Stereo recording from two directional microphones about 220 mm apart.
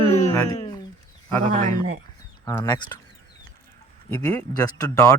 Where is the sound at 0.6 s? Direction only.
20° left (ahead or behind).